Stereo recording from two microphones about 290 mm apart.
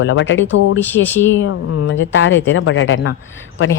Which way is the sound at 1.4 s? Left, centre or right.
Left.